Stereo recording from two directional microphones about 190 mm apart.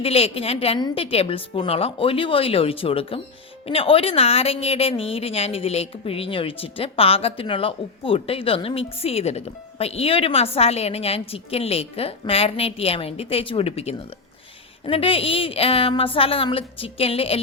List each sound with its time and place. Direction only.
0.0 s a woman's voice: 30° left (ahead or behind)